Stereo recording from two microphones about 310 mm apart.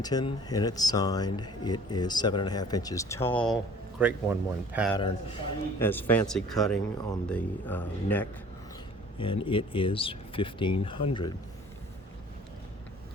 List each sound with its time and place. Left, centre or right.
0.0 s speech: centre
5.8 s speech: centre
9.1 s speech: centre